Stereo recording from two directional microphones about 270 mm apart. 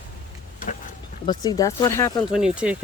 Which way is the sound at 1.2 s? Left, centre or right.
Centre.